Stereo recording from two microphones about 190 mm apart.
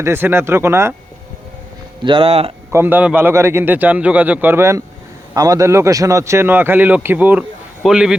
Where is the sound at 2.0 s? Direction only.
30° right (ahead or behind).